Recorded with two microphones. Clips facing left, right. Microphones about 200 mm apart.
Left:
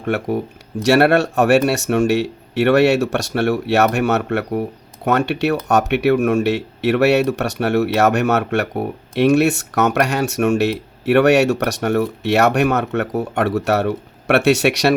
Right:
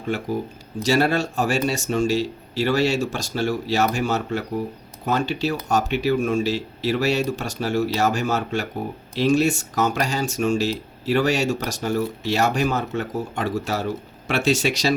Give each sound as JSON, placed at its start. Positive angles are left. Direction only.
{"t": 0.0, "sound": "speech", "side_deg": 65}